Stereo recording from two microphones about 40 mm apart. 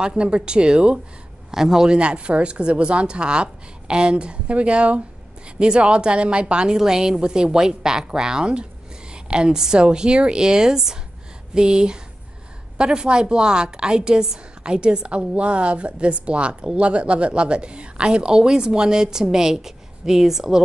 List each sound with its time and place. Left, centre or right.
0.0 s a woman's voice: right
1.5 s a woman's voice: centre
1.9 s a woman's voice: right; by 20.6 s centre